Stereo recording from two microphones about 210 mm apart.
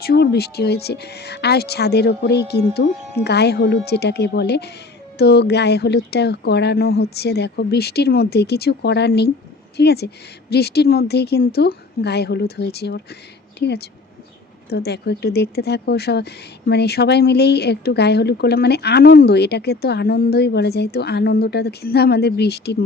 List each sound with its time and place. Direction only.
0.0 s speech: 50° left (ahead or behind)